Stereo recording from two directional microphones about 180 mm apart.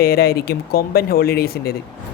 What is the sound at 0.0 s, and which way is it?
Speech, 60° left (ahead or behind).